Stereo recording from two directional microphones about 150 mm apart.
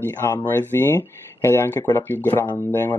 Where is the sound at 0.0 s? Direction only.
15° left (ahead or behind).